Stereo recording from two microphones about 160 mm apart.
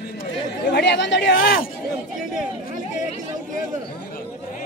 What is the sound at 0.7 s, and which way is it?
Chatter, 90° left.